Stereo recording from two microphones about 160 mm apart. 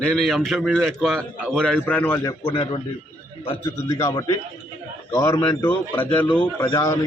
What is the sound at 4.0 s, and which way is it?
A man's voice, 20° left (ahead or behind).